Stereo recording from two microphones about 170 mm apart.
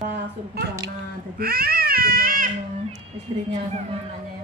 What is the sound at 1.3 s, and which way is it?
Speech, 65° right (ahead or behind).